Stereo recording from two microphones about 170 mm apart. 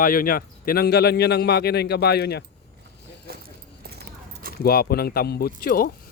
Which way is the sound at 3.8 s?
70° right (ahead or behind).